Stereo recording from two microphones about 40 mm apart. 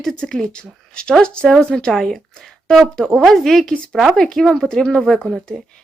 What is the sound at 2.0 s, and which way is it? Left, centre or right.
Speech, centre.